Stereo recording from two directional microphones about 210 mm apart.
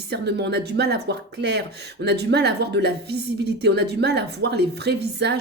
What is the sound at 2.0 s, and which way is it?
Speech, 55° right (ahead or behind).